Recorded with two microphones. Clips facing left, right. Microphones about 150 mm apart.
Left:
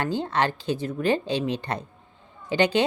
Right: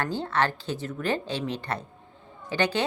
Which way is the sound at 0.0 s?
15° left (ahead or behind).